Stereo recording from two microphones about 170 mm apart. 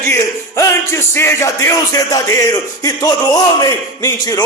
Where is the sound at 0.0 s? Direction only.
15° left (ahead or behind).